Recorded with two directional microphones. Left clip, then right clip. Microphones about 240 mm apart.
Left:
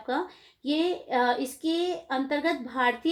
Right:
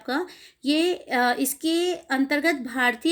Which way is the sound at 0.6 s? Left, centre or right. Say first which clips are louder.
Right 4 dB; right.